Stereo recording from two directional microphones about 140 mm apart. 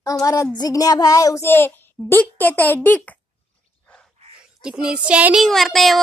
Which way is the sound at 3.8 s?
10° left (ahead or behind).